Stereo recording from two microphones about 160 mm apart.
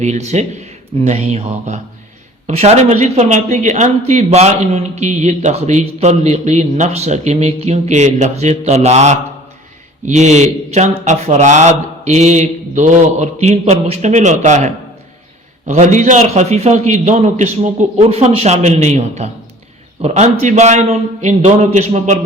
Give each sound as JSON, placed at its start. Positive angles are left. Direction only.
{"t": 0.0, "sound": "speech", "side_deg": -45}